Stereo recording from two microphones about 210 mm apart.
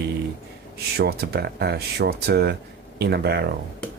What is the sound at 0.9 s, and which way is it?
Speech, 50° right (ahead or behind).